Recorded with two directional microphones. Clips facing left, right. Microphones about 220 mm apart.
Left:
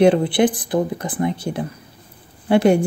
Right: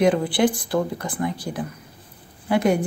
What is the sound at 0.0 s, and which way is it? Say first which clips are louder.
Speech: left 4 dB; 25° left (ahead or behind).